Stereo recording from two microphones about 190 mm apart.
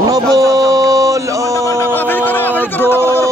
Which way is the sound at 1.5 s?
15° left (ahead or behind).